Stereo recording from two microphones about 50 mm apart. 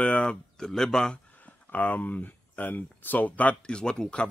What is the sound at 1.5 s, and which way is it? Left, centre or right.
Speech, left.